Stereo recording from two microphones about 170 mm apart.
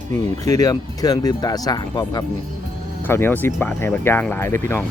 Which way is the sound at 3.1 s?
15° left (ahead or behind).